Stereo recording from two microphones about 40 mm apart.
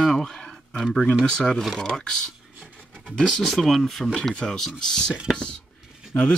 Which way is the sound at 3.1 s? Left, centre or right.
Centre.